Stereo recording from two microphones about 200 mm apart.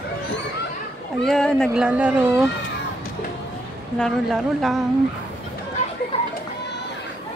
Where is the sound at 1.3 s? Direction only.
5° left (ahead or behind).